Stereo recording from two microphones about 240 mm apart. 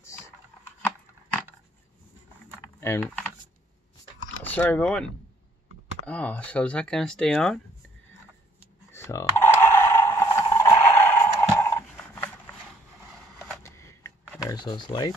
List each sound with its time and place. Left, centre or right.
2.8 s speech: centre
4.4 s speech: centre
6.0 s speech: centre
8.9 s a sound: centre
13.7 s a sound: centre
14.5 s speech: centre